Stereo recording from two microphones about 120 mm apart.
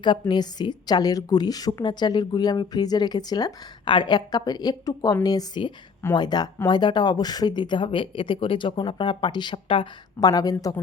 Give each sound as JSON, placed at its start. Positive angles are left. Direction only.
{"t": 0.0, "sound": "a woman's voice", "side_deg": 40}
{"t": 10.2, "sound": "a woman's voice", "side_deg": 30}